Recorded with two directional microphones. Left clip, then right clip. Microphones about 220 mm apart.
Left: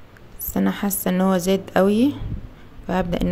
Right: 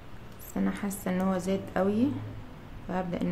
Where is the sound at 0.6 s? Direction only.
40° left (ahead or behind).